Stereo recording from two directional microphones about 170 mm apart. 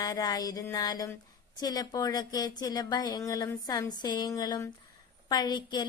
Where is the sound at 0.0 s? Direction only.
25° left (ahead or behind).